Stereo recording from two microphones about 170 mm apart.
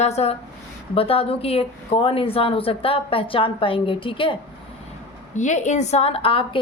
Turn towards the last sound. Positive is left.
turn(degrees=35)  # may be behind; listen again after turning